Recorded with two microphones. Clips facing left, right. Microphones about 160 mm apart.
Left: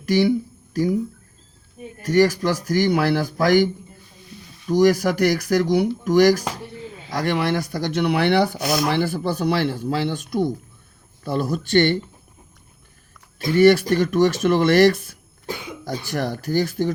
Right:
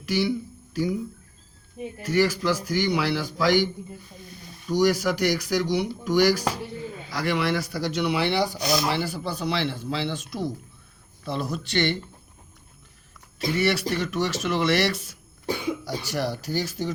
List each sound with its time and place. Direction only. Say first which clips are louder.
0.0 s a sound: left 7 dB; 50° left (ahead or behind)
2.0 s speech: left 6 dB; 45° left (ahead or behind)
4.8 s speech: left 5 dB; 50° left (ahead or behind)
13.6 s speech: left 11 dB; 50° left (ahead or behind)